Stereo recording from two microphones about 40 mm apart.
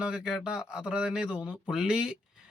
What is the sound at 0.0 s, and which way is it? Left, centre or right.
Speech, right.